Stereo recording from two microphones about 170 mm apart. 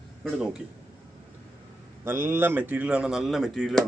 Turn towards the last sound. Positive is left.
turn(degrees=0)  # may be behind; listen again after turning